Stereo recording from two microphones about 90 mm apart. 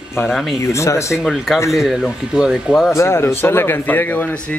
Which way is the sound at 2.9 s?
30° left (ahead or behind).